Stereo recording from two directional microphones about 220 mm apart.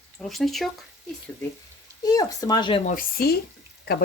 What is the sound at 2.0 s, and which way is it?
Speech, 15° left (ahead or behind).